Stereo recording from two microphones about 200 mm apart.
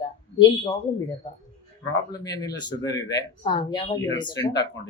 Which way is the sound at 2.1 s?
20° left (ahead or behind).